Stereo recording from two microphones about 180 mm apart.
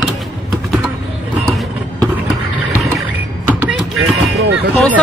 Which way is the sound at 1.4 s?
5° left (ahead or behind).